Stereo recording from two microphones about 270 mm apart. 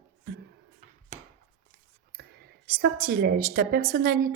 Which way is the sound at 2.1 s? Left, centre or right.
Right.